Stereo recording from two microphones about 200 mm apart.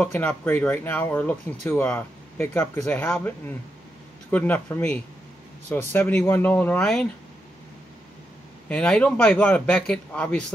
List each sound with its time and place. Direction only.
0.0 s speech: 10° left (ahead or behind)
8.6 s speech: 5° left (ahead or behind)